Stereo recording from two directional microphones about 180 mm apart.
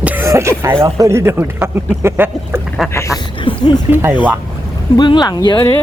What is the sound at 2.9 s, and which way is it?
Speech, 15° left (ahead or behind).